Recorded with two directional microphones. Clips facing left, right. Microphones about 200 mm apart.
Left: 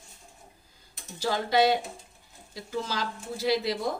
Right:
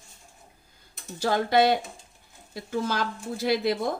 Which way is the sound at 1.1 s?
55° right (ahead or behind).